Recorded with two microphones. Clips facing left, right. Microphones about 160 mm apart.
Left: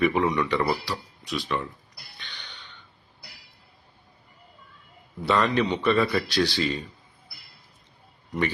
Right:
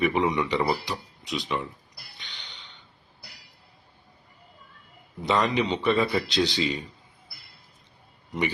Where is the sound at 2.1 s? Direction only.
15° right (ahead or behind).